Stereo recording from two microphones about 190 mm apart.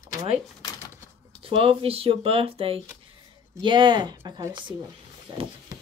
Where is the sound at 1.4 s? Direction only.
30° right (ahead or behind).